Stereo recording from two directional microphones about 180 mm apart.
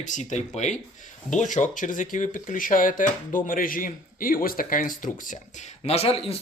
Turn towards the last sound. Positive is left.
turn(degrees=30)  # may be behind; listen again after turning